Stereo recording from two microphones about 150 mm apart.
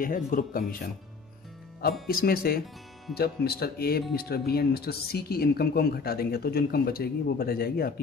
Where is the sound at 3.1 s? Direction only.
90° left.